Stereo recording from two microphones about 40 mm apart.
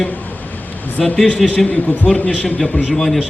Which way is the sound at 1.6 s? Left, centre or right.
Left.